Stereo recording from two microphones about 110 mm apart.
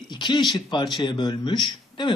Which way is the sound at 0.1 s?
45° left (ahead or behind).